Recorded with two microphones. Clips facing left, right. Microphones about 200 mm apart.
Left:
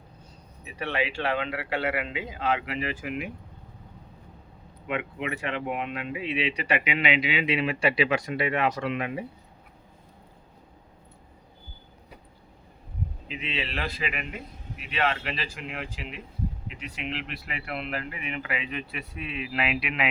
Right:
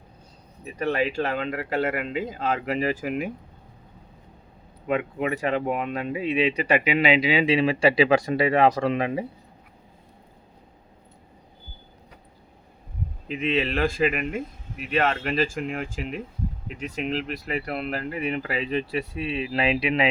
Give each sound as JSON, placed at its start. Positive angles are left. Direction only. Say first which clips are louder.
{"t": 0.6, "sound": "speech", "louder": "right 5 dB", "side_deg": -40}
{"t": 4.9, "sound": "speech", "louder": "right 6 dB", "side_deg": -40}
{"t": 13.2, "sound": "a man's voice", "louder": "right 11 dB", "side_deg": -50}